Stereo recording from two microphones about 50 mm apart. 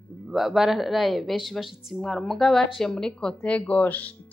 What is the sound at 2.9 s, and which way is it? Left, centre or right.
Speech, centre.